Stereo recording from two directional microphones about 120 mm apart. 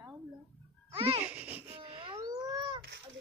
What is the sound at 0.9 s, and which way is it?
Babbling, 50° right (ahead or behind).